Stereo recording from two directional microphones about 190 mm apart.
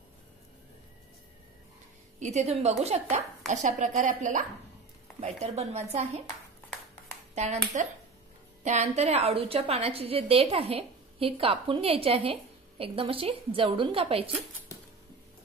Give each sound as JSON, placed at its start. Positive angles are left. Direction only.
{"t": 2.1, "sound": "a woman's voice", "side_deg": -35}
{"t": 7.7, "sound": "a woman's voice", "side_deg": -40}